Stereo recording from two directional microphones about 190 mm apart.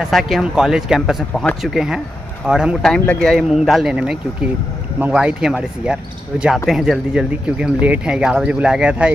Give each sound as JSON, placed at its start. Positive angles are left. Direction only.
{"t": 0.1, "sound": "speech", "side_deg": 0}